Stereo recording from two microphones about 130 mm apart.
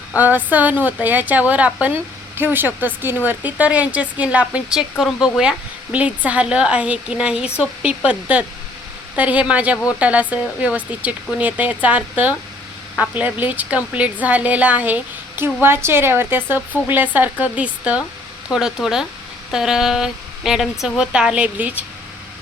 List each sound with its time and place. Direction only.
0.2 s speech: 15° right (ahead or behind)